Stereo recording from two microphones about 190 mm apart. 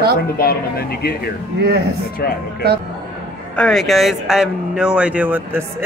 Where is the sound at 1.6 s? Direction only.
55° right (ahead or behind).